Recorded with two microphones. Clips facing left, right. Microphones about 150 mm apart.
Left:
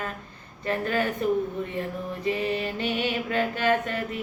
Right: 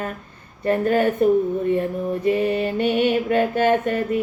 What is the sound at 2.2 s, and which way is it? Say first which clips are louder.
Speech: right 6 dB; 50° right (ahead or behind).